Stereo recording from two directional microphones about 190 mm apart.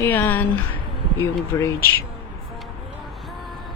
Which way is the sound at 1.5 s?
15° left (ahead or behind).